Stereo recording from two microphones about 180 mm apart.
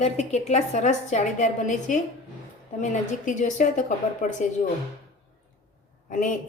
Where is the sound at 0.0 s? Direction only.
40° left (ahead or behind).